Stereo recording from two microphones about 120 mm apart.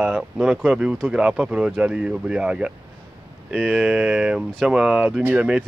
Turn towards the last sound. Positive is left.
turn(degrees=-15)  # may be behind; listen again after turning